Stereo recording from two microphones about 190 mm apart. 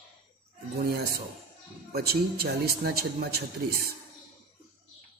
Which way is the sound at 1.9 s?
55° right (ahead or behind).